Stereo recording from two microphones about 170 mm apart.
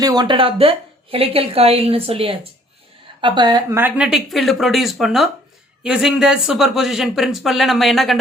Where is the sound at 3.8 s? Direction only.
10° right (ahead or behind).